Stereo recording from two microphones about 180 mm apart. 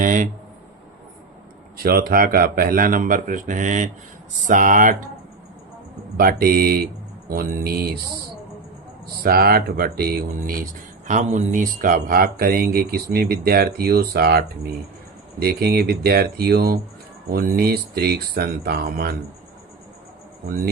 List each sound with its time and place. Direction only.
0.0 s speech: 45° right (ahead or behind)
1.8 s speech: 55° right (ahead or behind)
6.1 s speech: 55° right (ahead or behind)
9.2 s speech: 55° right (ahead or behind)